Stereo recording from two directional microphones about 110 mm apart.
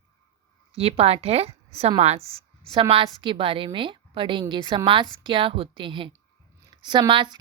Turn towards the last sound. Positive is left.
turn(degrees=-45)  # may be behind; listen again after turning